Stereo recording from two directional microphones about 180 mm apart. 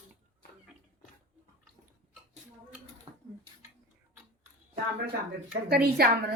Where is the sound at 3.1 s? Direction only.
30° right (ahead or behind).